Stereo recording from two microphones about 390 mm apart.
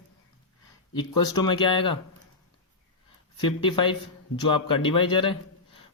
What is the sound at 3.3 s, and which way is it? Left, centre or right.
Speech, centre.